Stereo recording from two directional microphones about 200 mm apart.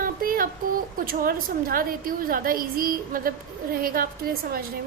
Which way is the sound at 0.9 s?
45° right (ahead or behind).